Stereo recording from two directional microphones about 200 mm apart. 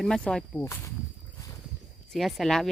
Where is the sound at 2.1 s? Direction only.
Centre (ahead or behind).